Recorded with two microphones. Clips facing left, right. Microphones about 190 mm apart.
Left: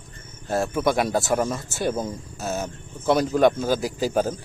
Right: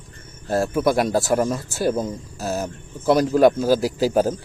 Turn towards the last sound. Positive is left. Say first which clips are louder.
# right 4 dB
turn(degrees=-10)  # may be behind; listen again after turning